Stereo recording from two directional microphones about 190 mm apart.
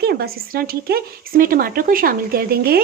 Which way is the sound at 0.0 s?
55° right (ahead or behind).